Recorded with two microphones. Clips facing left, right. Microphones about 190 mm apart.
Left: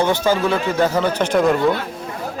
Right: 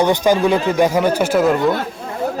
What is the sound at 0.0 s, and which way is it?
Speech, 15° right (ahead or behind).